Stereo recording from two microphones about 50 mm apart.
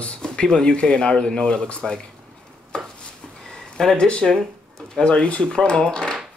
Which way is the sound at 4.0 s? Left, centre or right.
Centre.